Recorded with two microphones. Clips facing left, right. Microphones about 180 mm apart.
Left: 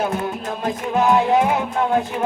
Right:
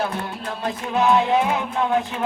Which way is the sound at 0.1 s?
45° left (ahead or behind).